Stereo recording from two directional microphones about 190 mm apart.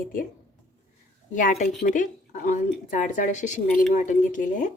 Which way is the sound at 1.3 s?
40° left (ahead or behind).